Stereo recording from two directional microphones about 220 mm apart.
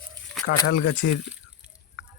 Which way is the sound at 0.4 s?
60° left (ahead or behind).